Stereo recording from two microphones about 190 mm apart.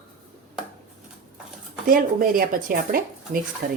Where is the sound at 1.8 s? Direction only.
50° right (ahead or behind).